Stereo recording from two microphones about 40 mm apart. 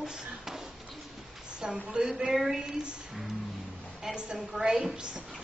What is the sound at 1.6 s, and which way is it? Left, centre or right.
Speech, right.